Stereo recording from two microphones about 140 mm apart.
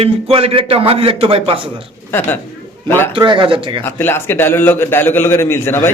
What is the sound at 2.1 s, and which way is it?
A woman's voice, 15° left (ahead or behind).